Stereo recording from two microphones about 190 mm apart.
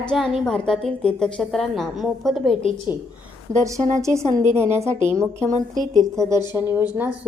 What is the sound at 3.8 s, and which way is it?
Speech, 40° right (ahead or behind).